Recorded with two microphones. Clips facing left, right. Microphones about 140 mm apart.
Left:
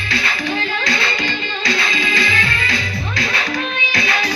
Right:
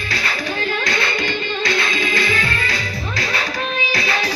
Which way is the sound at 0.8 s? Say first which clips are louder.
Even; 50° right (ahead or behind).